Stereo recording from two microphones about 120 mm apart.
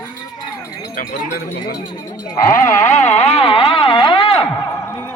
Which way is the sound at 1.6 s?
35° left (ahead or behind).